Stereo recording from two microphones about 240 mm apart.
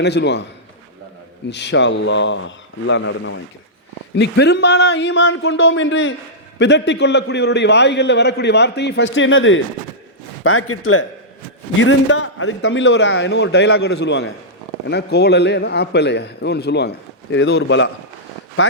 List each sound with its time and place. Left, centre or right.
0.0 s a man's voice: left
1.5 s a man's voice: left
11.8 s a man's voice: left